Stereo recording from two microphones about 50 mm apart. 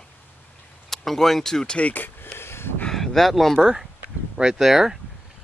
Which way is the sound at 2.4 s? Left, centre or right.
Left.